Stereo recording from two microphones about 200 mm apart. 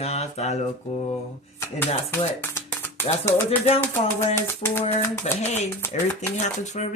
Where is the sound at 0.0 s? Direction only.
30° left (ahead or behind).